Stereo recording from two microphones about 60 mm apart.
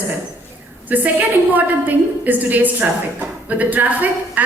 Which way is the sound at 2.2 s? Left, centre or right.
Right.